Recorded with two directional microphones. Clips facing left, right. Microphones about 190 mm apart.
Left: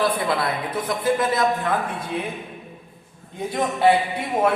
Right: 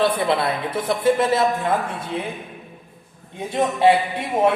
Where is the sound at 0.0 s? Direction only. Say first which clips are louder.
Right 3 dB; 25° right (ahead or behind).